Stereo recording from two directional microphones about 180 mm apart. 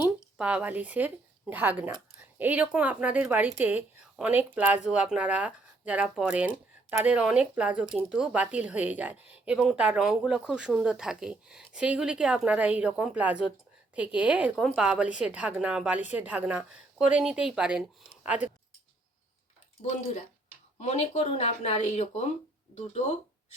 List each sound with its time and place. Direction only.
0.3 s speech: 5° right (ahead or behind)
19.8 s speech: 40° left (ahead or behind)